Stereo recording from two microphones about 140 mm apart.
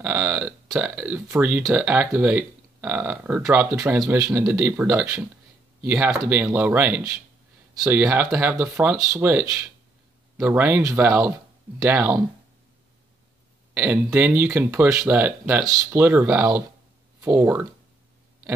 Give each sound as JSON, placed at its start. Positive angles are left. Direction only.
{"t": 0.0, "sound": "speech", "side_deg": -15}
{"t": 0.8, "sound": "speech", "side_deg": -5}
{"t": 1.1, "sound": "speech", "side_deg": -15}
{"t": 13.7, "sound": "speech", "side_deg": -15}